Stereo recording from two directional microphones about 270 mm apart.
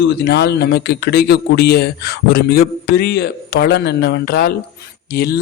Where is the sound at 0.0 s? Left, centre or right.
Left.